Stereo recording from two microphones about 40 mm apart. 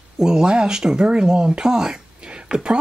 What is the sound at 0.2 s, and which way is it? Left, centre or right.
Speech, centre.